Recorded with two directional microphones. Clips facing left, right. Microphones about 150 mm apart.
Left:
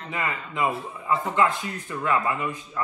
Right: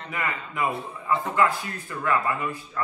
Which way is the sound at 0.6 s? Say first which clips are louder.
Left 2 dB; 25° left (ahead or behind).